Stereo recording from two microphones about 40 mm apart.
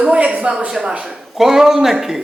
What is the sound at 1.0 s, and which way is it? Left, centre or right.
Speech, centre.